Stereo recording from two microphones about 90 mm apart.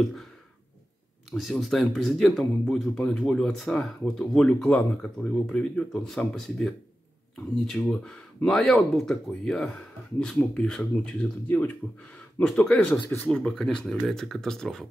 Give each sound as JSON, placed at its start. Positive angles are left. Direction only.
{"t": 1.3, "sound": "speech", "side_deg": 0}